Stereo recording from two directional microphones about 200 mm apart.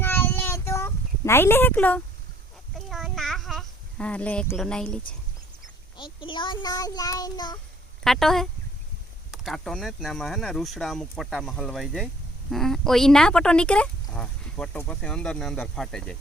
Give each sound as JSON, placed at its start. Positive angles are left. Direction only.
{"t": 0.0, "sound": "child singing", "side_deg": 10}
{"t": 2.7, "sound": "a sound", "side_deg": 0}
{"t": 6.0, "sound": "a child's voice", "side_deg": 25}
{"t": 8.0, "sound": "speech", "side_deg": 0}